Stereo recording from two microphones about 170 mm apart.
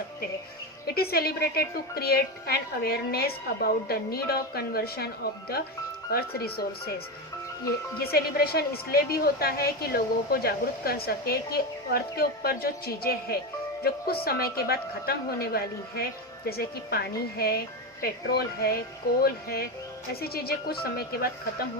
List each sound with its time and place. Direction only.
0.9 s a woman's voice: 65° left (ahead or behind)
7.9 s a woman's voice: 65° left (ahead or behind)